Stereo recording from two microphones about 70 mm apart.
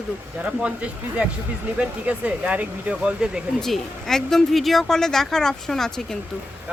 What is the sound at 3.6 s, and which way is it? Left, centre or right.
Speech, centre.